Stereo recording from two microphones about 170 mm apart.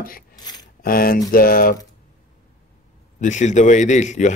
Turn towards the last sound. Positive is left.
turn(degrees=45)  # may be behind; listen again after turning